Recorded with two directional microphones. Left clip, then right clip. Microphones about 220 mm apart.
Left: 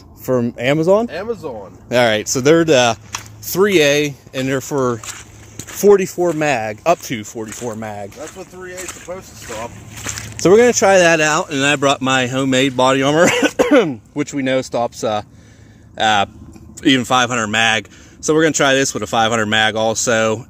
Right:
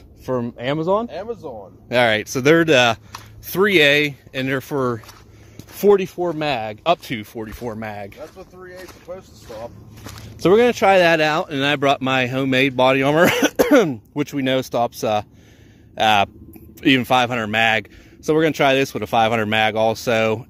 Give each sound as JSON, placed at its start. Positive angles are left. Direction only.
{"t": 0.2, "sound": "speech", "side_deg": 15}
{"t": 1.0, "sound": "speech", "side_deg": 50}
{"t": 1.9, "sound": "speech", "side_deg": -15}
{"t": 6.0, "sound": "speech", "side_deg": 0}
{"t": 9.1, "sound": "speech", "side_deg": 45}
{"t": 10.4, "sound": "speech", "side_deg": -15}
{"t": 13.2, "sound": "speech", "side_deg": -40}